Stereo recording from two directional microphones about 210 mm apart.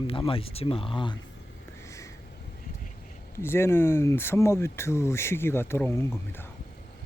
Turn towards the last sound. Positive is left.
turn(degrees=10)  # may be behind; listen again after turning